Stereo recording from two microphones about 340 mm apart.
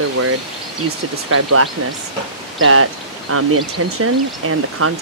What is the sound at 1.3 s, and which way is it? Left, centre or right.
Speech, right.